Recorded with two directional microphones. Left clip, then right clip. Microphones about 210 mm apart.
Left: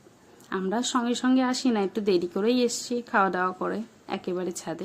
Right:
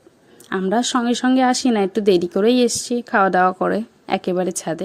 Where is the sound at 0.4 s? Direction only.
35° right (ahead or behind).